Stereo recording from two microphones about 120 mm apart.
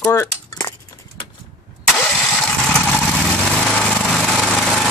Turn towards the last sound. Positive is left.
turn(degrees=0)  # may be behind; listen again after turning